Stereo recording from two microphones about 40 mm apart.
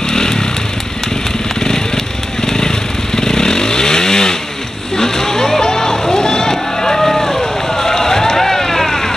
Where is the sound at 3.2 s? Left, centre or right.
Centre.